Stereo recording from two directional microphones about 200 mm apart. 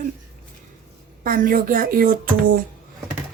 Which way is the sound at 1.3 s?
45° right (ahead or behind).